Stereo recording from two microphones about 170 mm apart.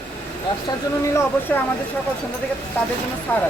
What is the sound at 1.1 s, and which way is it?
Speech, 15° left (ahead or behind).